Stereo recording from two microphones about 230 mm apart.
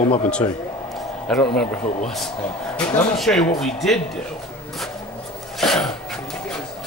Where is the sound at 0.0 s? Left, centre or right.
Left.